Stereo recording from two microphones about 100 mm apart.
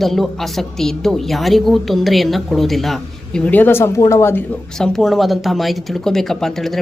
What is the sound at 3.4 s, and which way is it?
Speech, 20° left (ahead or behind).